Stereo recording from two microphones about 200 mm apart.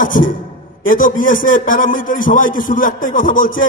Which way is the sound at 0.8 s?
45° left (ahead or behind).